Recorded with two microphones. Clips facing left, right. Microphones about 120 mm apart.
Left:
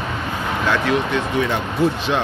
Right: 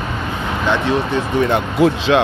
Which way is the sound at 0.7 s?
25° right (ahead or behind).